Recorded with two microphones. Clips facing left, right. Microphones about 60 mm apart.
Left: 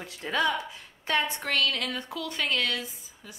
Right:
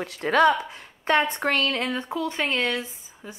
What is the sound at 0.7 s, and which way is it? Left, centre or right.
Speech, right.